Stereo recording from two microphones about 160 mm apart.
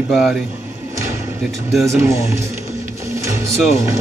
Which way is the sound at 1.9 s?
15° right (ahead or behind).